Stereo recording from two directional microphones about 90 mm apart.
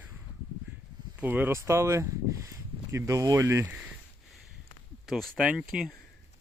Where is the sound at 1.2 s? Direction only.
20° right (ahead or behind).